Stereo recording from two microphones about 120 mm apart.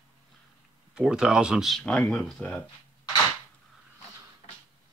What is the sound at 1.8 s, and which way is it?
Speech, 10° left (ahead or behind).